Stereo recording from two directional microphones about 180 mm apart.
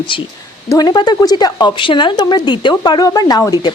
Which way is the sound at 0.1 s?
30° left (ahead or behind).